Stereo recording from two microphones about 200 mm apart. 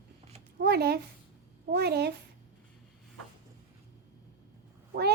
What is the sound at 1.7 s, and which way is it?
Speech, 55° right (ahead or behind).